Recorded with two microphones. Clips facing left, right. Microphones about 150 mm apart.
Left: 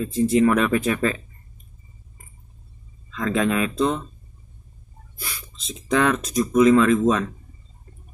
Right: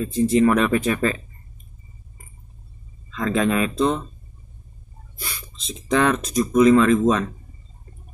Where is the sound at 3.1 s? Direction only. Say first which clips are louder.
Right 1 dB; centre (ahead or behind).